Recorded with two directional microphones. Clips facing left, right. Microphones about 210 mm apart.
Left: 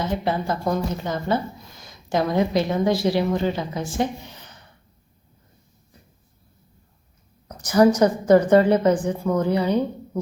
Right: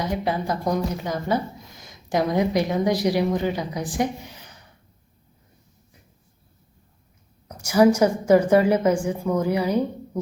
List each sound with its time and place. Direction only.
0.0 s speech: 15° right (ahead or behind)
7.4 s speech: 10° right (ahead or behind)